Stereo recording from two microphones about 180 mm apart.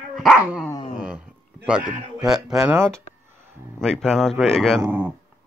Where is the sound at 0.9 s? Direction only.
5° right (ahead or behind).